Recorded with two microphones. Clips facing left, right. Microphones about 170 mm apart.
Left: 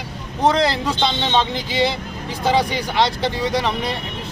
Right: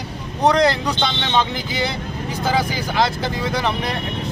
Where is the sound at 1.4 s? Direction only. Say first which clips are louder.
Left 1 dB; 30° left (ahead or behind).